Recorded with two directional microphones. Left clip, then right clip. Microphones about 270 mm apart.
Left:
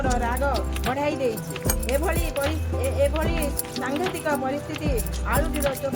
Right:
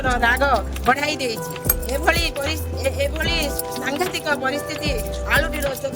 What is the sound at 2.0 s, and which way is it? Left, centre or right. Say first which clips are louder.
Speech: right 8 dB; right.